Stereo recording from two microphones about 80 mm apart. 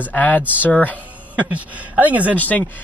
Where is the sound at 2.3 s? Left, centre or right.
Left.